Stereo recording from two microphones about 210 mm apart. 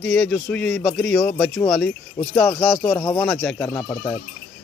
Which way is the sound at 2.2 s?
20° left (ahead or behind).